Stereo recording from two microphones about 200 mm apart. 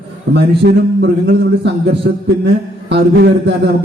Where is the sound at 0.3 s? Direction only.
60° right (ahead or behind).